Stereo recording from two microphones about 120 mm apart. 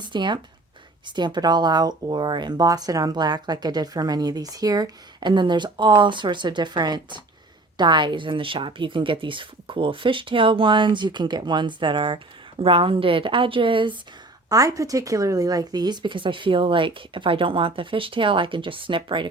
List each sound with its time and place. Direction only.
0.0 s speech: 40° right (ahead or behind)
14.5 s speech: 30° right (ahead or behind)